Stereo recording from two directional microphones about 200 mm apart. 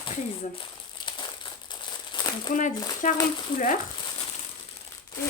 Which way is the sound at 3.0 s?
40° left (ahead or behind).